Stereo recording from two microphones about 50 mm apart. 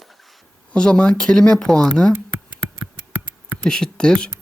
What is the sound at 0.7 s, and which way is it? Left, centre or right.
Speech, centre.